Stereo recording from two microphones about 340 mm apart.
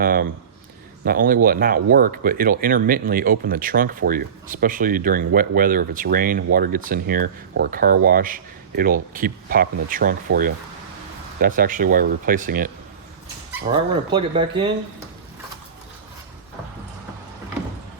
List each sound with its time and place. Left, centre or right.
0.0 s a sound: right
1.0 s speech: right
11.3 s speech: right